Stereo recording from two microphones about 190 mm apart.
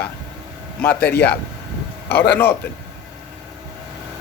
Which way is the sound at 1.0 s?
55° left (ahead or behind).